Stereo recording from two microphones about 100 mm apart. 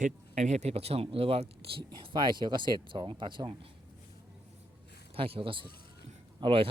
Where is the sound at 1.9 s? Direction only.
50° right (ahead or behind).